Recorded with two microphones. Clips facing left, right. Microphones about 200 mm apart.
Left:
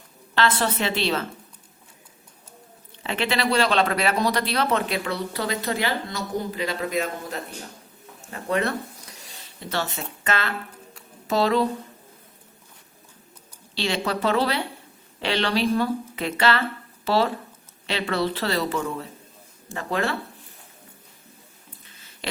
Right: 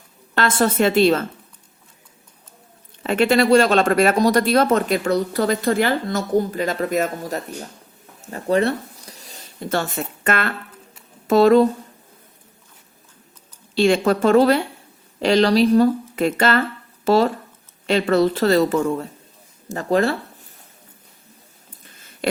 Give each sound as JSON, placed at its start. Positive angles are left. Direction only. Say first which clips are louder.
{"t": 0.3, "sound": "speech", "louder": "right 5 dB", "side_deg": -50}
{"t": 3.0, "sound": "speech", "louder": "right 9 dB", "side_deg": -45}
{"t": 8.3, "sound": "speech", "louder": "right 6 dB", "side_deg": -35}
{"t": 13.7, "sound": "speech", "louder": "right 10 dB", "side_deg": -50}
{"t": 21.8, "sound": "a sound", "louder": "right 11 dB", "side_deg": -50}